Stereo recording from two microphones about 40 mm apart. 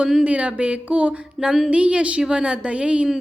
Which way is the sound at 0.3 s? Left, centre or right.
Right.